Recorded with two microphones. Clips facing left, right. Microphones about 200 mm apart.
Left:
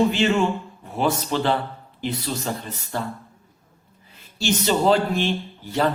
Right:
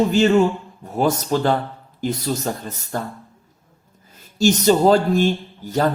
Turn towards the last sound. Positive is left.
turn(degrees=-40)  # may be behind; listen again after turning